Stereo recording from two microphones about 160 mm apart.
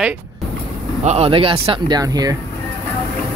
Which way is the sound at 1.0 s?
40° right (ahead or behind).